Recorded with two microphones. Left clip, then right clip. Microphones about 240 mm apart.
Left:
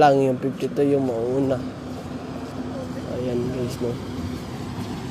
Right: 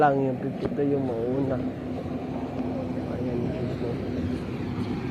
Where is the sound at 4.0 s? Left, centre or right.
Centre.